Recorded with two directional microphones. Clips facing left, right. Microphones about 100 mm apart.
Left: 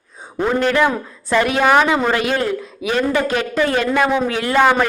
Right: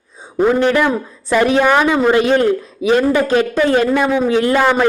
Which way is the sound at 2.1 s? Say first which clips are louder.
Right 6 dB; 25° right (ahead or behind).